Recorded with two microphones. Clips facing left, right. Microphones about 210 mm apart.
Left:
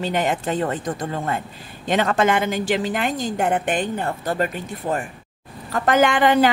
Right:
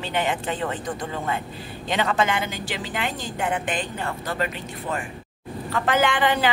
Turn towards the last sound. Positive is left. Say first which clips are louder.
# left 5 dB
turn(degrees=45)  # may be behind; listen again after turning